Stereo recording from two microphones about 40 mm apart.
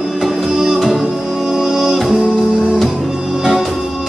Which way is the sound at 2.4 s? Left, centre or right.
Right.